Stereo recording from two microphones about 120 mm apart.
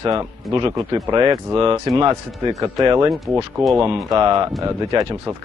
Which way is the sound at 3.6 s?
Centre (ahead or behind).